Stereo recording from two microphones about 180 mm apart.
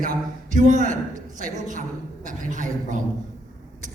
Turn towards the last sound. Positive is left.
turn(degrees=-45)  # may be behind; listen again after turning